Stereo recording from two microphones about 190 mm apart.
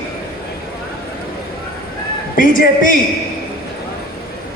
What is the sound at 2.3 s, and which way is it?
Speech, 45° left (ahead or behind).